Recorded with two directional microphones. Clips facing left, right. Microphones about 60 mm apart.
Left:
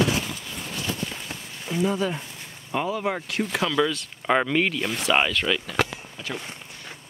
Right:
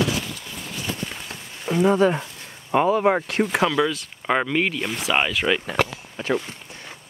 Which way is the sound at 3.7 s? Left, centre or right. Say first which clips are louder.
Right 1 dB; centre.